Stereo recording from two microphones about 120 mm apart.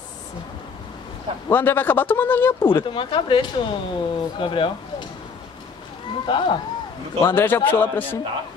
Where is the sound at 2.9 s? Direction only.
45° left (ahead or behind).